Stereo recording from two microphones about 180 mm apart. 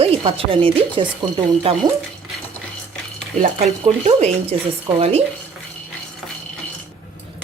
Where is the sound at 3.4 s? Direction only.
35° right (ahead or behind).